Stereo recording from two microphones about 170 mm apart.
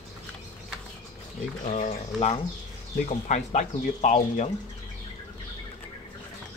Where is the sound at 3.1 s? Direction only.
45° left (ahead or behind).